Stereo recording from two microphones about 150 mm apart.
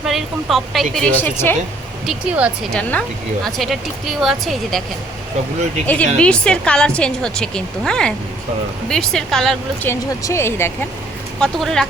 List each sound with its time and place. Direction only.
0.0 s speech: centre (ahead or behind)
2.0 s speech: 10° right (ahead or behind)
5.8 s speech: 10° left (ahead or behind)
9.8 s speech: 20° left (ahead or behind)
11.3 s speech: 5° left (ahead or behind)